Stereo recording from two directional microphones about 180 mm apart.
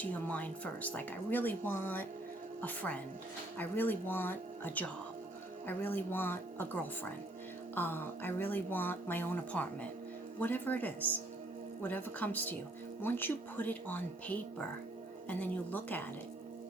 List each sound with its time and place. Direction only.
0.0 s speech: 10° left (ahead or behind)